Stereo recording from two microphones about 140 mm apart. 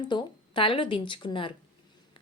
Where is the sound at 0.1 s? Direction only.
35° left (ahead or behind).